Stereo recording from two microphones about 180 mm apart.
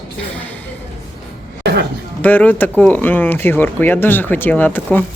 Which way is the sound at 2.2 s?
10° left (ahead or behind).